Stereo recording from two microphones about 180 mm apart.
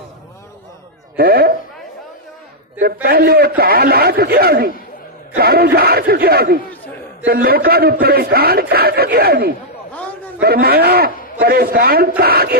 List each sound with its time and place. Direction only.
1.1 s speech: 55° right (ahead or behind)
2.8 s a man's voice: 55° right (ahead or behind)